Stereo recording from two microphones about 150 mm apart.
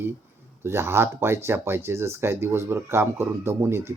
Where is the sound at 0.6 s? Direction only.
15° right (ahead or behind).